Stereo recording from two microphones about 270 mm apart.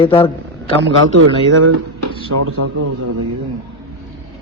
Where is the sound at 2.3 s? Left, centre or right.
Right.